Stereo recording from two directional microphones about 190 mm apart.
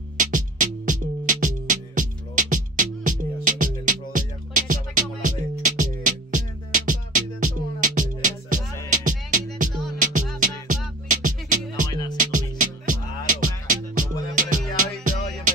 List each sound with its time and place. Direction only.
0.2 s music: 45° right (ahead or behind)